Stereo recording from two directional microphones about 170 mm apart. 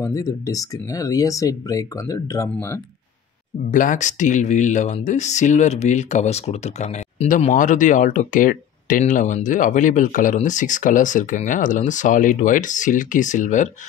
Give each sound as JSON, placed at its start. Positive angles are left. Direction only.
{"t": 0.0, "sound": "speech", "side_deg": 20}
{"t": 3.7, "sound": "speech", "side_deg": 50}